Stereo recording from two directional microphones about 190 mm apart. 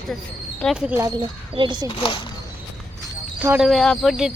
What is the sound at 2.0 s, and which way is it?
Speech, 25° left (ahead or behind).